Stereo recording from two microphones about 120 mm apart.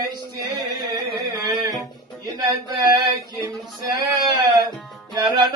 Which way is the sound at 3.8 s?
35° right (ahead or behind).